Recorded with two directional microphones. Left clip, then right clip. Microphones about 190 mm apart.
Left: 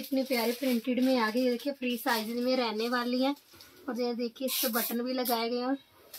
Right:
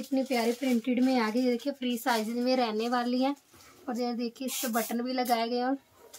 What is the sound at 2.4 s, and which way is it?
Speech, 25° right (ahead or behind).